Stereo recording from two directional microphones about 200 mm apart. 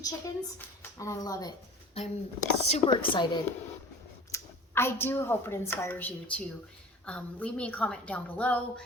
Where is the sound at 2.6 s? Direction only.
30° left (ahead or behind).